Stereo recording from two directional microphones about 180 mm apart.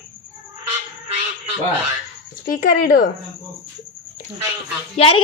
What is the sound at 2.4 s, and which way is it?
Speech, 55° left (ahead or behind).